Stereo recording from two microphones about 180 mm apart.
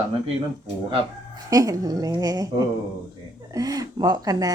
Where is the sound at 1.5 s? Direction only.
20° right (ahead or behind).